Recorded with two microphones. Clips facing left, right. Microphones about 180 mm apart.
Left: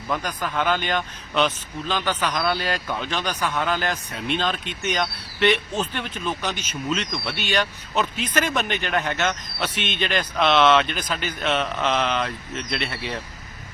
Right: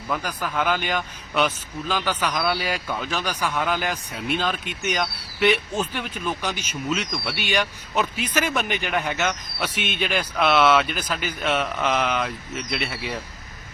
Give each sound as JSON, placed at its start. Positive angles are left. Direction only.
{"t": 0.1, "sound": "speech", "side_deg": -5}